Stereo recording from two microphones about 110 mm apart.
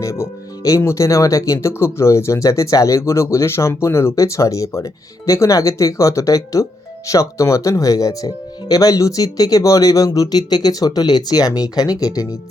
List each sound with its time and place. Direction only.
0.0 s speech: 25° left (ahead or behind)